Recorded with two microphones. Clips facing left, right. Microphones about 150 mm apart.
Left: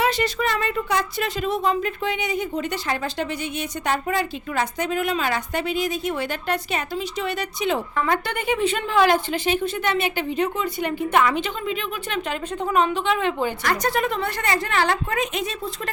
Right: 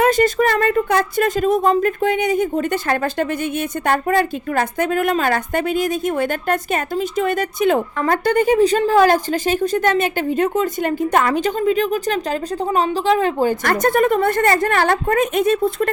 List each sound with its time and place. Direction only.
0.0 s a woman's voice: 45° right (ahead or behind)